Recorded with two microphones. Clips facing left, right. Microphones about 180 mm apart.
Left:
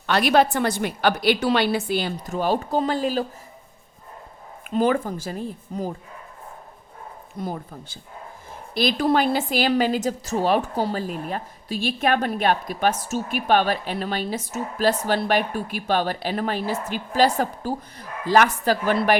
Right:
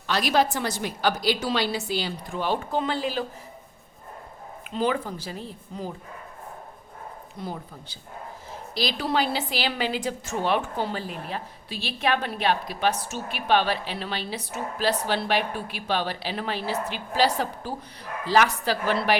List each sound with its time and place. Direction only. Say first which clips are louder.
0.1 s a woman's voice: left 4 dB; 60° left (ahead or behind); by 3.2 s 45° left (ahead or behind)
4.7 s a woman's voice: left 5 dB; 50° left (ahead or behind)
7.3 s a woman's voice: left 5 dB; 50° left (ahead or behind)